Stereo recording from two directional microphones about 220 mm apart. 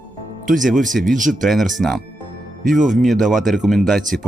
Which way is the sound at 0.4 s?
35° right (ahead or behind).